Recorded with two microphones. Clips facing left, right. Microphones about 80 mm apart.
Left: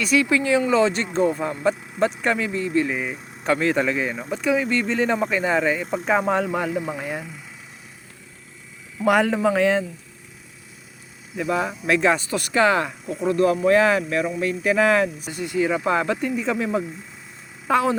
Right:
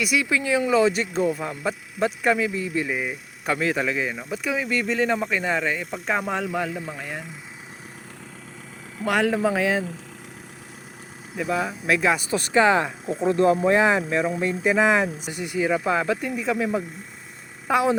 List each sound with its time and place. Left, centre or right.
0.0 s speech: centre
6.6 s speech: centre
9.0 s speech: centre
11.3 s speech: centre